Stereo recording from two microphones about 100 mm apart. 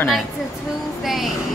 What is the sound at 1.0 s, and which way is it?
Music, centre (ahead or behind).